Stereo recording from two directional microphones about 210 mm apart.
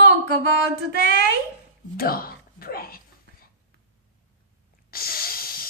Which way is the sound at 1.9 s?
45° left (ahead or behind).